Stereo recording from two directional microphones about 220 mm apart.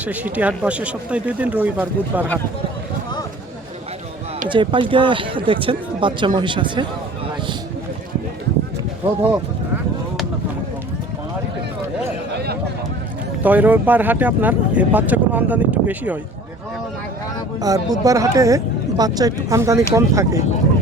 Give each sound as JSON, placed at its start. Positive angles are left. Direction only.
{"t": 0.0, "sound": "speech", "side_deg": -5}
{"t": 4.4, "sound": "speech", "side_deg": -20}
{"t": 13.4, "sound": "speech", "side_deg": -5}
{"t": 17.6, "sound": "speech", "side_deg": -15}